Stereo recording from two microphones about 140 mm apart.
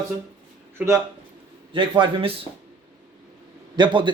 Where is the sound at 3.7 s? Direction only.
35° right (ahead or behind).